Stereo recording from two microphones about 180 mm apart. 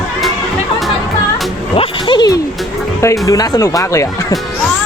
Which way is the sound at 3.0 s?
20° left (ahead or behind).